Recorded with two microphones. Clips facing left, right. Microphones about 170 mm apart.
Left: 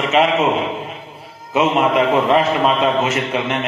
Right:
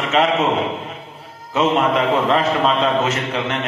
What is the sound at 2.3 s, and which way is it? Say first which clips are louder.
A man's voice: left 2 dB; 10° left (ahead or behind).